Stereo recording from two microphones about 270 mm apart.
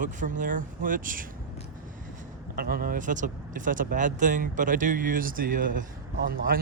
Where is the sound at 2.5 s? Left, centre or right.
Right.